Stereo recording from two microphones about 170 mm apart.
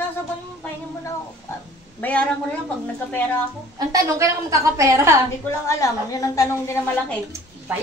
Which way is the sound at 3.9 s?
20° right (ahead or behind).